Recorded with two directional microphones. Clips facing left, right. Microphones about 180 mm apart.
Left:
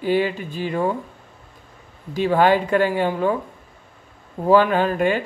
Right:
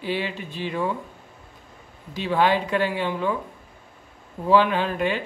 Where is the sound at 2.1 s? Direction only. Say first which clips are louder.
Left 5 dB; 50° left (ahead or behind).